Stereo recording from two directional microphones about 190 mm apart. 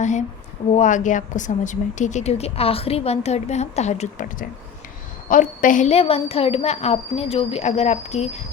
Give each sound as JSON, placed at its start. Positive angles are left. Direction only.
{"t": 0.0, "sound": "a woman's voice", "side_deg": 40}